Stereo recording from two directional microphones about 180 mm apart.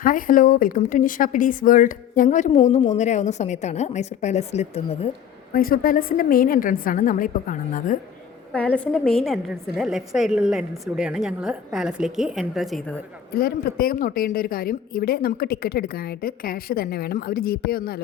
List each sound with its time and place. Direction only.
0.0 s a woman's voice: 50° left (ahead or behind)
5.5 s a woman's voice: 55° left (ahead or behind)
8.5 s a woman's voice: 5° left (ahead or behind)
13.3 s a woman's voice: 55° left (ahead or behind)